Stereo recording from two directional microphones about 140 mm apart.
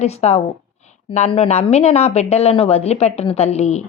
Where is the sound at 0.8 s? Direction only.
55° left (ahead or behind).